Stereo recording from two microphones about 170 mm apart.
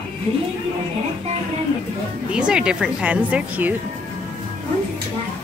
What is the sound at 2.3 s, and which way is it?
A woman's voice, 5° right (ahead or behind).